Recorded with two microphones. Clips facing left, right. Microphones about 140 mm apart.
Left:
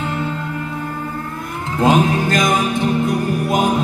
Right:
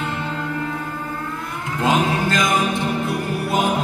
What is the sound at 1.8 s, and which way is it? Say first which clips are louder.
Speech: left 4 dB; 40° left (ahead or behind).